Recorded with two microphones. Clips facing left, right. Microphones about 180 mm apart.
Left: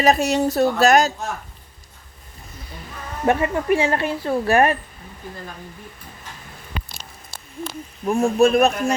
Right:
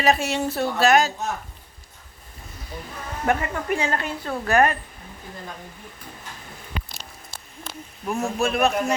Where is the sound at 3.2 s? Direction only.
25° left (ahead or behind).